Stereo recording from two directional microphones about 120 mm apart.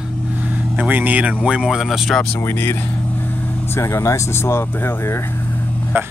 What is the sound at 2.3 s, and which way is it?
Speech, 20° left (ahead or behind).